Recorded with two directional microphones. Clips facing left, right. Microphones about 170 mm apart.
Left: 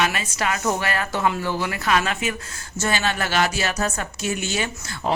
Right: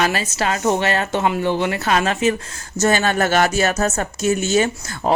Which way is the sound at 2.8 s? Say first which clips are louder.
Right 7 dB; 45° right (ahead or behind).